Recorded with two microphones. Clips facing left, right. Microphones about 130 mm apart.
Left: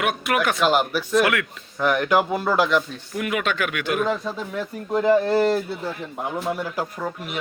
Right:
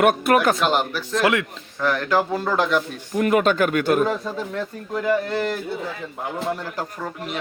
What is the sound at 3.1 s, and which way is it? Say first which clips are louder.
Speech: right 7 dB; 40° right (ahead or behind).